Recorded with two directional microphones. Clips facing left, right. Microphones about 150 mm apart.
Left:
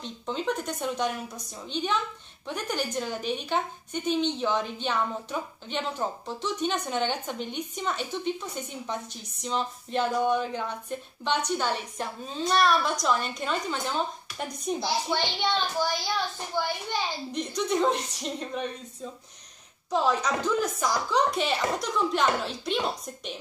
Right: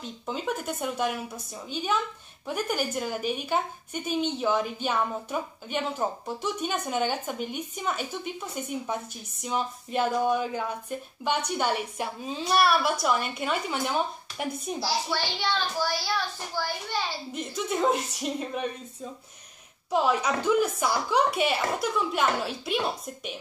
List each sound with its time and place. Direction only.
0.0 s a woman's voice: 5° right (ahead or behind)
14.8 s a child's voice: 20° left (ahead or behind)
17.3 s a woman's voice: 5° right (ahead or behind)
19.9 s a woman's voice: 10° right (ahead or behind)